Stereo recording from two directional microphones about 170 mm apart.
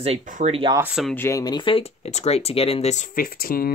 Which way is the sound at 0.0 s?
45° right (ahead or behind).